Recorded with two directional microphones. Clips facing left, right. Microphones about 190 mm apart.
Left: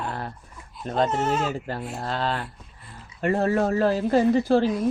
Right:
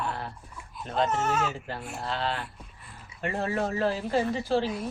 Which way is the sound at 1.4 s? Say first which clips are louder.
Left 3 dB; 40° left (ahead or behind).